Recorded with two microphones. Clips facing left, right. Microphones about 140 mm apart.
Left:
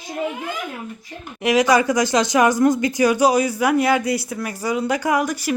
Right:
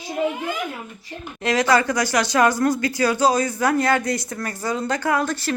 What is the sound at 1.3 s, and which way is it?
Speech, 15° left (ahead or behind).